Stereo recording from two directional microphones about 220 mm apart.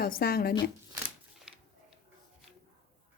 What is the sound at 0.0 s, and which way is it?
Speech, 45° left (ahead or behind).